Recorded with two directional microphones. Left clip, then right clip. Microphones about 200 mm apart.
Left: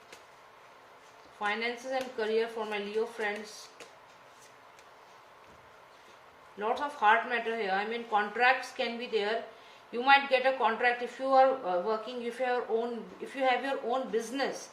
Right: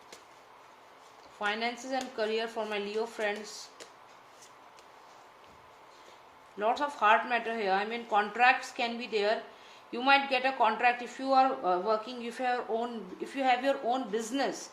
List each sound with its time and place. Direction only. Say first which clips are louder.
1.4 s a woman's voice: even; 45° right (ahead or behind)
6.6 s a woman's voice: right 2 dB; 45° right (ahead or behind)